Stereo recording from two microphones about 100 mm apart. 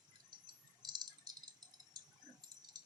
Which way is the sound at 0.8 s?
45° right (ahead or behind).